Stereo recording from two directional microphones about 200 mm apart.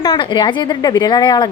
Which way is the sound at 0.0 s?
20° left (ahead or behind).